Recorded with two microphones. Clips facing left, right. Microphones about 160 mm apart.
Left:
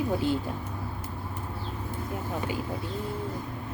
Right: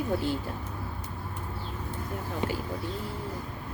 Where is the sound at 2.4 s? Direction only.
20° right (ahead or behind).